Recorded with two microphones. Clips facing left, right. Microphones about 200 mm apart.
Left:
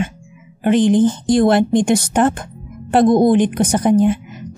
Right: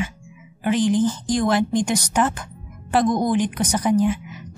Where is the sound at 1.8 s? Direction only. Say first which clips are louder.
Left 6 dB; 55° left (ahead or behind).